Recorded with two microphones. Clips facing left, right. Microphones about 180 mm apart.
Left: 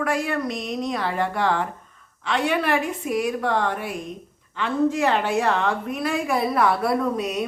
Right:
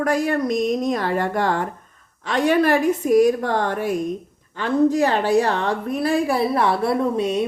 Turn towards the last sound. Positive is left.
turn(degrees=-30)  # may be behind; listen again after turning